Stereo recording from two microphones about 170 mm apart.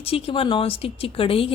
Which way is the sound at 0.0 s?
35° left (ahead or behind).